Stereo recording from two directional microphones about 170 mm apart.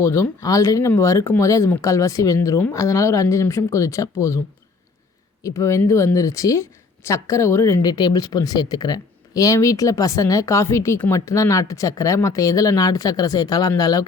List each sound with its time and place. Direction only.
0.0 s speech: 15° left (ahead or behind)
5.4 s a woman's voice: 15° left (ahead or behind)